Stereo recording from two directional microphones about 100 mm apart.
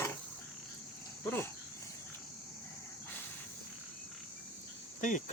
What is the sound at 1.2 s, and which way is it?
Speech, 25° left (ahead or behind).